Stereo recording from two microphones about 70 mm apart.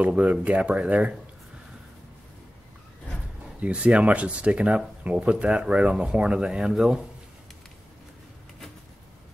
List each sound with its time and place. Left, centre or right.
0.0 s speech: centre
3.6 s speech: centre